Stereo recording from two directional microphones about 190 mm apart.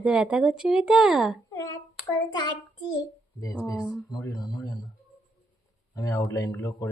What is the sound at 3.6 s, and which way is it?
Speech, 15° left (ahead or behind).